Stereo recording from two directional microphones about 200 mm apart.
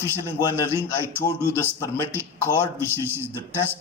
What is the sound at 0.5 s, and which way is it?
Speech, 10° right (ahead or behind).